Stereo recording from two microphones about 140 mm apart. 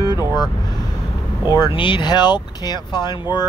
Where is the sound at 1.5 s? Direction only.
35° left (ahead or behind).